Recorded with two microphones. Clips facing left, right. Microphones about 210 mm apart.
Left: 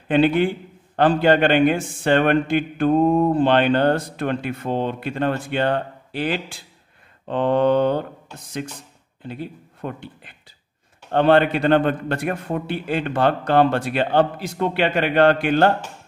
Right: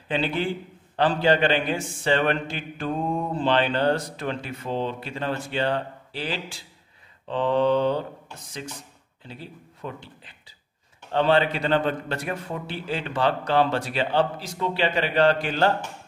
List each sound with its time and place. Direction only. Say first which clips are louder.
0.1 s a man's voice: left 8 dB; 55° left (ahead or behind)
9.2 s a man's voice: left 9 dB; 55° left (ahead or behind)